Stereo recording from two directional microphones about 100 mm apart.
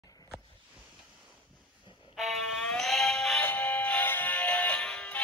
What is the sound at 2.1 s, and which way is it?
Music, centre (ahead or behind).